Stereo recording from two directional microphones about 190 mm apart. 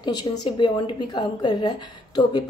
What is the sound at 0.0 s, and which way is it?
A woman's voice, 20° left (ahead or behind).